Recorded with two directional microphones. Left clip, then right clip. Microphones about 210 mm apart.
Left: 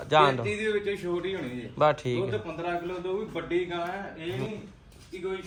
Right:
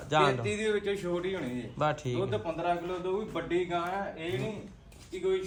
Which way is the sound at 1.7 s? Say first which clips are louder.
Left 7 dB; 10° right (ahead or behind).